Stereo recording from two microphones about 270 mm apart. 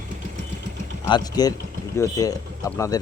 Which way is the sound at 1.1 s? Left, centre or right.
Centre.